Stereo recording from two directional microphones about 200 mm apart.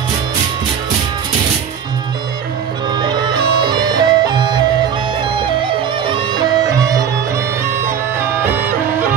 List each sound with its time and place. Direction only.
3.0 s music: 20° right (ahead or behind)